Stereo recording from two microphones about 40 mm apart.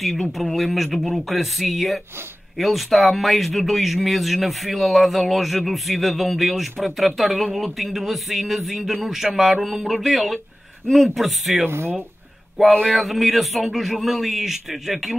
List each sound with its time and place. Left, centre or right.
0.0 s speech: centre
11.6 s speech: right
12.8 s speech: centre